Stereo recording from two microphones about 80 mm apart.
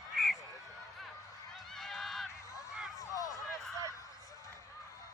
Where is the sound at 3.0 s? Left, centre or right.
Left.